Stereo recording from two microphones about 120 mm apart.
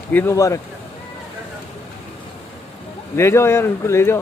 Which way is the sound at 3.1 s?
20° left (ahead or behind).